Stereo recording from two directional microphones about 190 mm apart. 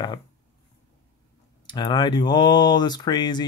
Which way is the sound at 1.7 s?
25° left (ahead or behind).